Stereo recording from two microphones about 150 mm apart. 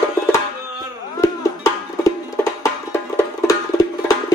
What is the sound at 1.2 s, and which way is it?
Music, 20° left (ahead or behind).